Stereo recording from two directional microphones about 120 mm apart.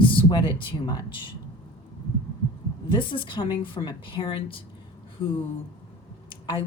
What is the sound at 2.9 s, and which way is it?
A woman's voice, 45° left (ahead or behind).